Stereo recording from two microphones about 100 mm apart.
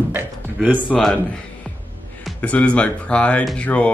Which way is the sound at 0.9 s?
5° left (ahead or behind).